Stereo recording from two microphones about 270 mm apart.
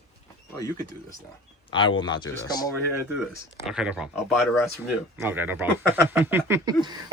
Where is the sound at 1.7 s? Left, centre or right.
Centre.